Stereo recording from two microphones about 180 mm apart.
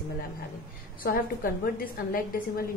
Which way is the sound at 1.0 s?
55° left (ahead or behind).